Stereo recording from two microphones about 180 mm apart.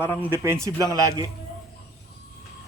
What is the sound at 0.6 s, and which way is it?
Speech, 20° right (ahead or behind).